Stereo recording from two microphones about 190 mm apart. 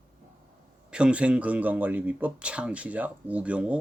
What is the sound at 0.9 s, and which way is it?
Speech, 5° right (ahead or behind).